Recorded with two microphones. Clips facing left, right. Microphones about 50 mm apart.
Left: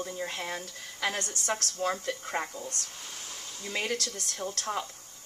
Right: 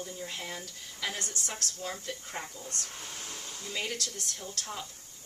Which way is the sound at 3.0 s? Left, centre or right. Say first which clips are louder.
Right 1 dB; right.